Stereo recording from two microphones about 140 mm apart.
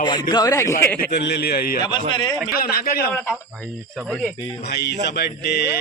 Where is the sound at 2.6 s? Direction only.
90° left.